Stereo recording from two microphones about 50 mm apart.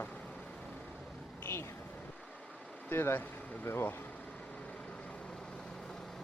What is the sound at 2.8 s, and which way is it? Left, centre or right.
Speech, left.